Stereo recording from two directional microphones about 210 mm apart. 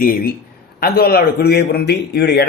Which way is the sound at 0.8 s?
45° left (ahead or behind).